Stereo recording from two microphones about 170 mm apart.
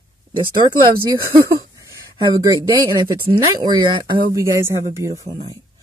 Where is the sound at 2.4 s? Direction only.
25° right (ahead or behind).